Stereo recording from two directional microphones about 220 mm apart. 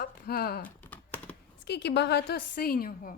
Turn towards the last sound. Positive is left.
turn(degrees=40)  # may be behind; listen again after turning